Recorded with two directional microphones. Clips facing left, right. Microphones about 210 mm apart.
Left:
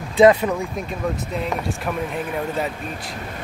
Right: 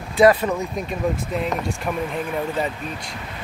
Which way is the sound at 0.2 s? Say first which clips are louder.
Left 2 dB; 20° left (ahead or behind).